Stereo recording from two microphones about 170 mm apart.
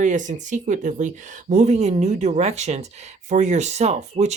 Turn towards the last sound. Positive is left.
turn(degrees=-40)  # may be behind; listen again after turning